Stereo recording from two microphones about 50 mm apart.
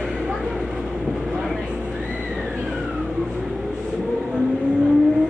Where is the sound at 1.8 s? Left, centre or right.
Right.